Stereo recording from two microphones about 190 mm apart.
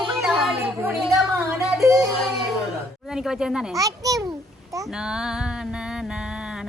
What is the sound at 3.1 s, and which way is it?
Music, 5° right (ahead or behind).